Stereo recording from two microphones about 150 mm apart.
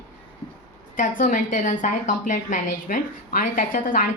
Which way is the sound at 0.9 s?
60° left (ahead or behind).